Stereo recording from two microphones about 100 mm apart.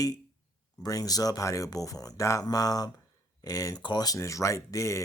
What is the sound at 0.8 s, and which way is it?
Speech, 35° left (ahead or behind).